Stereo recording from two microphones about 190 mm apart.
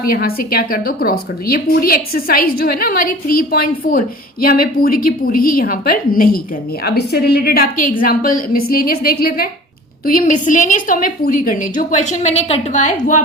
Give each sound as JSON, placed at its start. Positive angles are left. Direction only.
{"t": 0.0, "sound": "a woman's voice", "side_deg": 50}